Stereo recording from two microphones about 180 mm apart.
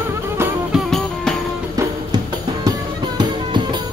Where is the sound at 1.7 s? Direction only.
20° right (ahead or behind).